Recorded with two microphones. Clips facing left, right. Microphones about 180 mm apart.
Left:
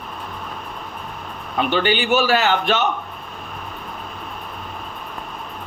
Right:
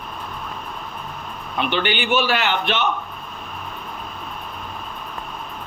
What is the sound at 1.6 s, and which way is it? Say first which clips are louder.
A man's voice: left 3 dB; 40° left (ahead or behind).